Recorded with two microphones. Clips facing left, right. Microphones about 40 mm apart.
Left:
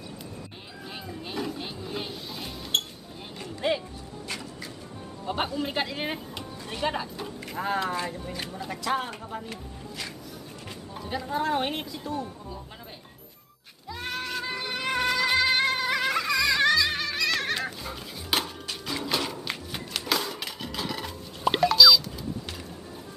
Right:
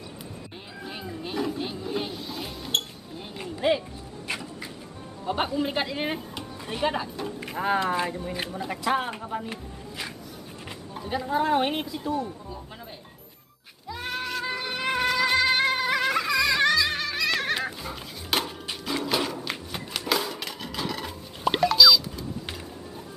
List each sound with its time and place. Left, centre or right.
0.8 s music: centre
4.3 s music: right
5.2 s speech: centre
7.9 s speech: centre
13.8 s goat: centre
18.9 s a sound: centre
19.5 s music: centre